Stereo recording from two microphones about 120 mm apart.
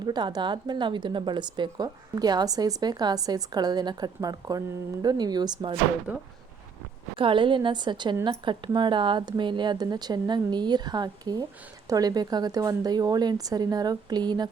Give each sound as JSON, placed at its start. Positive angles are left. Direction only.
{"t": 0.0, "sound": "a woman's voice", "side_deg": -40}
{"t": 6.1, "sound": "speech", "side_deg": -10}
{"t": 7.2, "sound": "a woman's voice", "side_deg": -45}